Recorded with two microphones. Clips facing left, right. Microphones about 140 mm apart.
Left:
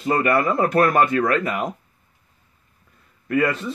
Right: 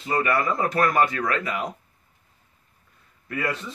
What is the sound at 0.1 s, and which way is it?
A man's voice, 50° left (ahead or behind).